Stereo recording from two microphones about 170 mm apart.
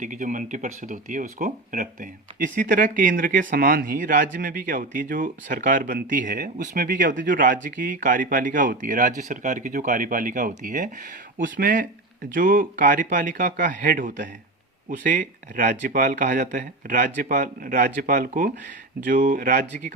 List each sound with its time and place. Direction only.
0.0 s speech: 50° right (ahead or behind)